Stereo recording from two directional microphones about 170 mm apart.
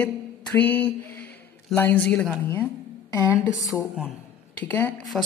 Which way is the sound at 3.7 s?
5° right (ahead or behind).